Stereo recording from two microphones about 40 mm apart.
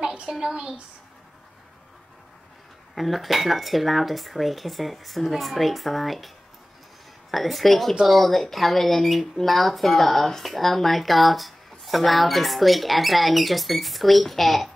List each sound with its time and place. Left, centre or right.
0.0 s a sound: right
0.3 s a woman's voice: centre
2.9 s speech: centre